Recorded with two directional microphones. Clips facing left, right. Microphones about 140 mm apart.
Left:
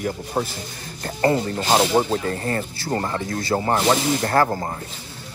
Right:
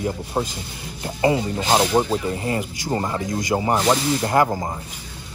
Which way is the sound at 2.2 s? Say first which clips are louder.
Right 1 dB; 15° right (ahead or behind).